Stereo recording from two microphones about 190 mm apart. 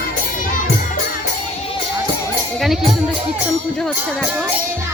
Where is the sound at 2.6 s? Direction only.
Centre (ahead or behind).